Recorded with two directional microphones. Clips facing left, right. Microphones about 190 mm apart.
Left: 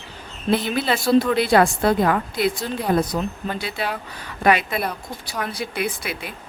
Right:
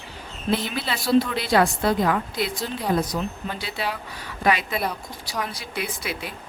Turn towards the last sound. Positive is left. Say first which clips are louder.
# left 3 dB
turn(degrees=55)  # may be behind; listen again after turning